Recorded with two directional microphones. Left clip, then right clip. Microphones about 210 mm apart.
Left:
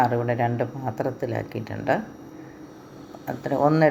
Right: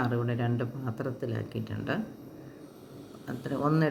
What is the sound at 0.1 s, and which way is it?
Speech, 55° left (ahead or behind).